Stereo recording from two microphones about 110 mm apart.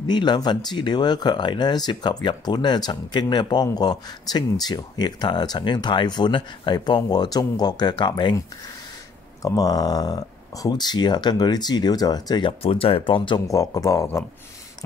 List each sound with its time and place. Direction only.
0.1 s speech: 40° left (ahead or behind)
9.4 s speech: 35° left (ahead or behind)
12.6 s speech: 60° left (ahead or behind)
13.5 s speech: 30° left (ahead or behind)